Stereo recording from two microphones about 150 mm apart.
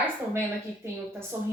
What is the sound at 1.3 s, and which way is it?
Speech, 20° right (ahead or behind).